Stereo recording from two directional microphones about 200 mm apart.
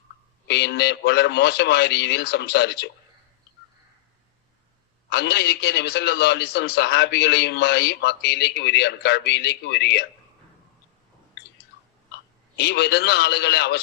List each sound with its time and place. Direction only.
0.4 s a man's voice: 55° left (ahead or behind)
5.0 s a man's voice: 55° left (ahead or behind)
12.5 s a man's voice: 55° left (ahead or behind)